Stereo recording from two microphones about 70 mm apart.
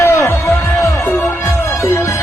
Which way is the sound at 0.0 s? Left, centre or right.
Left.